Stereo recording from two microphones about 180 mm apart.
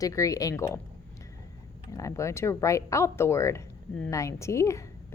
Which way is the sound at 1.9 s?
15° left (ahead or behind).